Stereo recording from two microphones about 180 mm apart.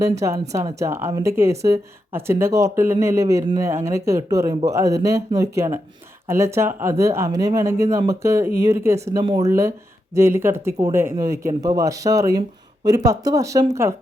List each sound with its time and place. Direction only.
0.0 s speech: 15° right (ahead or behind)